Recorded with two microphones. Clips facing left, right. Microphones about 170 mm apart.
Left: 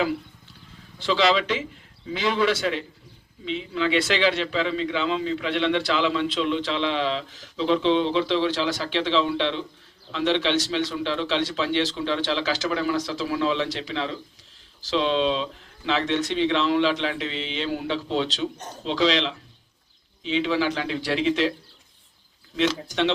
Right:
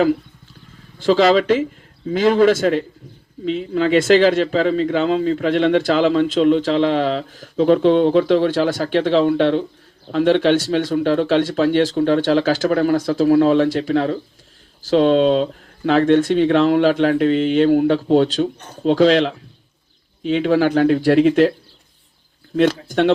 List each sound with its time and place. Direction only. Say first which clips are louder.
0.9 s a man's voice: right 8 dB; 50° right (ahead or behind)
22.5 s a man's voice: right 8 dB; 50° right (ahead or behind)